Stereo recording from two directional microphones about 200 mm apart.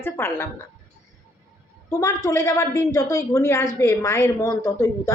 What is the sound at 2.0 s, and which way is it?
A woman's voice, 15° left (ahead or behind).